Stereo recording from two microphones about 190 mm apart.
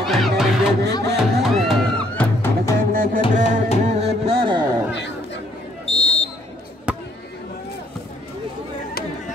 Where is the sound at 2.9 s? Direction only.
50° right (ahead or behind).